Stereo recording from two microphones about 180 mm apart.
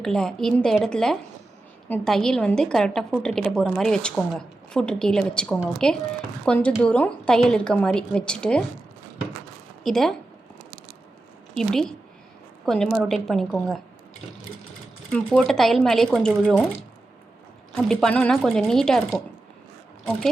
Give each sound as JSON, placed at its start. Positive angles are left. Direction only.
{"t": 0.0, "sound": "a woman's voice", "side_deg": 5}
{"t": 9.8, "sound": "a woman's voice", "side_deg": 0}
{"t": 11.5, "sound": "a woman's voice", "side_deg": 0}
{"t": 15.1, "sound": "a woman's voice", "side_deg": 5}
{"t": 17.7, "sound": "a woman's voice", "side_deg": 5}